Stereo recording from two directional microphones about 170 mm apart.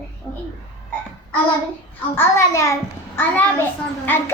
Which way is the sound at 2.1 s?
15° left (ahead or behind).